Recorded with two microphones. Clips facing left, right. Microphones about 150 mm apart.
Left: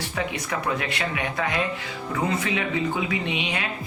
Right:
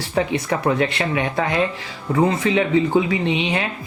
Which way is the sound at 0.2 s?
30° right (ahead or behind).